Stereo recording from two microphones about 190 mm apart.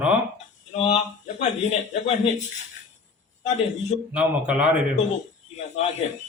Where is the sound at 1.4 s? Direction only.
35° left (ahead or behind).